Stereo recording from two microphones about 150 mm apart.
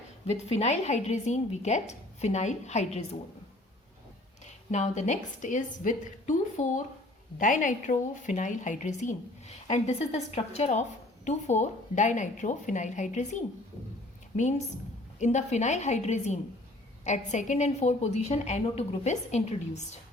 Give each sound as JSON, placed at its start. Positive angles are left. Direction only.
{"t": 0.3, "sound": "a woman's voice", "side_deg": 45}
{"t": 4.4, "sound": "a woman's voice", "side_deg": 50}
{"t": 14.3, "sound": "a woman's voice", "side_deg": 50}